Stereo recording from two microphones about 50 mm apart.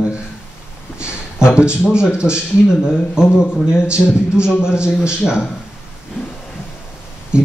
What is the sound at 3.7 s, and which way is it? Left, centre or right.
Speech, centre.